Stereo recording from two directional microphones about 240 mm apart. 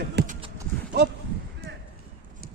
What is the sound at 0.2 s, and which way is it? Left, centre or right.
Clip-clop, right.